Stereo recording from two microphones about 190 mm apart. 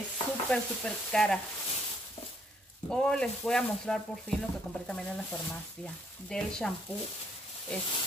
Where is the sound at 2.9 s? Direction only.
5° left (ahead or behind).